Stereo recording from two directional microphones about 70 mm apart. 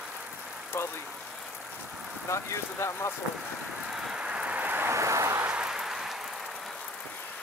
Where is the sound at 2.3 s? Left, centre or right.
Left.